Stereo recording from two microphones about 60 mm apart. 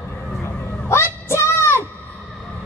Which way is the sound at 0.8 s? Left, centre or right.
Left.